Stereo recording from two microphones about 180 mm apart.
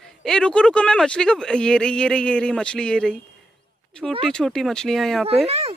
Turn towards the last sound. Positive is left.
turn(degrees=-35)  # may be behind; listen again after turning